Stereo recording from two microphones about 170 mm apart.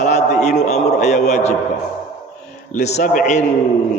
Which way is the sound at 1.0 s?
45° left (ahead or behind).